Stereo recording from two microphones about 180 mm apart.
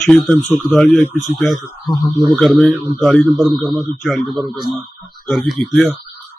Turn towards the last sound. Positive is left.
turn(degrees=5)  # may be behind; listen again after turning